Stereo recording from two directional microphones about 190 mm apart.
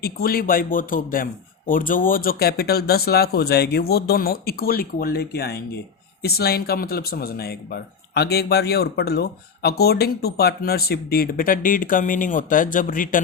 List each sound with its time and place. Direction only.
0.0 s speech: 50° left (ahead or behind)